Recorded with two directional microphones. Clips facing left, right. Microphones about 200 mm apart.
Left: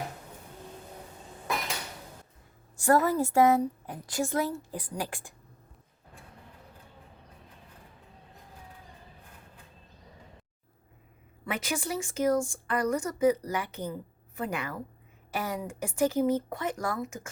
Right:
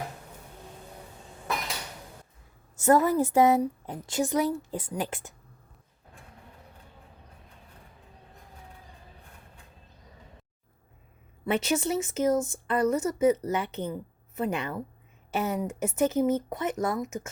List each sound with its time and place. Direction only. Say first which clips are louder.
2.7 s a woman's voice: right 2 dB; 20° right (ahead or behind)
11.4 s a woman's voice: right 6 dB; 25° right (ahead or behind)